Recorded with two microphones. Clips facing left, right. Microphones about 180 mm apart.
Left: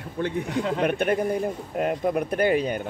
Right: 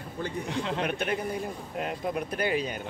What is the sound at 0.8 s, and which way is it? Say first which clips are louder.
Speech: left 7 dB; 55° left (ahead or behind).